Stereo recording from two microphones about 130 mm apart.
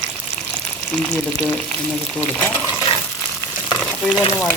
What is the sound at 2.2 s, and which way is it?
Speech, 15° left (ahead or behind).